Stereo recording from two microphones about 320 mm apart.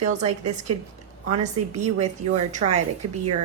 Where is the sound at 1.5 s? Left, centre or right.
Right.